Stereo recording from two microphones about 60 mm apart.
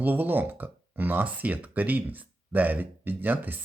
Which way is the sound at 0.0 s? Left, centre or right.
Right.